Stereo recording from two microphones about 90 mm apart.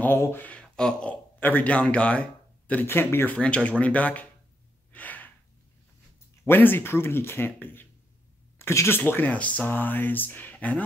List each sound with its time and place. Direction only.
0.0 s speech: 25° left (ahead or behind)
2.7 s speech: 25° left (ahead or behind)
3.3 s speech: 15° left (ahead or behind)
4.9 s gasp: 20° left (ahead or behind)
6.4 s speech: 25° left (ahead or behind)